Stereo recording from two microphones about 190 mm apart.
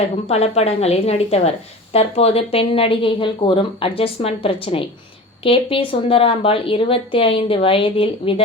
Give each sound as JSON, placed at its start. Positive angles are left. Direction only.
{"t": 0.3, "sound": "a woman's voice", "side_deg": 35}